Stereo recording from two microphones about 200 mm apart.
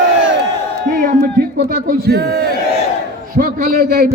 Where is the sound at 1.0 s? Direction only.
45° right (ahead or behind).